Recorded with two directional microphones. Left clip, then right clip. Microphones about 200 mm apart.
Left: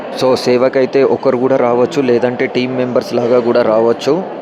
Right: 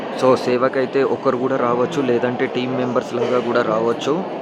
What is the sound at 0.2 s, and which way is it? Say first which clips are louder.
Speech: left 4 dB; 20° left (ahead or behind).